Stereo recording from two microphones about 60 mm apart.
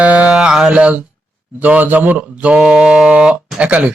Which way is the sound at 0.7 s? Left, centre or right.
Right.